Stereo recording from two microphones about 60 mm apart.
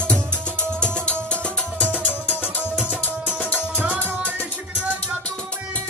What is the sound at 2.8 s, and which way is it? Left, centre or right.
Tabla, centre.